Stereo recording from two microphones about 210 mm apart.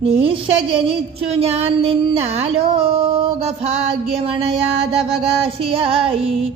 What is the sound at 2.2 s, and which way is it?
Speech, 30° right (ahead or behind).